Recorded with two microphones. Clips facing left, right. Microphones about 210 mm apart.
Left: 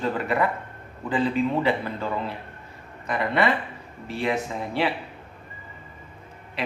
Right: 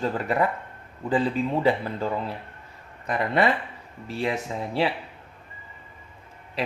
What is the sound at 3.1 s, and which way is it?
Speech, 40° right (ahead or behind).